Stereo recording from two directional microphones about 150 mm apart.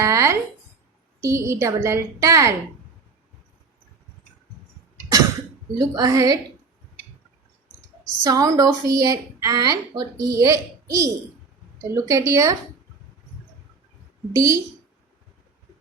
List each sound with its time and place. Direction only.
0.0 s a sound: 20° right (ahead or behind)
1.2 s a woman's voice: 20° right (ahead or behind)
5.7 s a woman's voice: 20° right (ahead or behind)
8.2 s a woman's voice: 25° right (ahead or behind)
14.3 s a woman's voice: 20° right (ahead or behind)